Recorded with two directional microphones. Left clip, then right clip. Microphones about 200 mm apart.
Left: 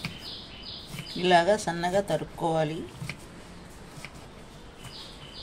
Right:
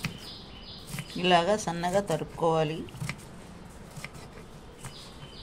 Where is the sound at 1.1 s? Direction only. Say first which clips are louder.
Left 2 dB; 5° right (ahead or behind).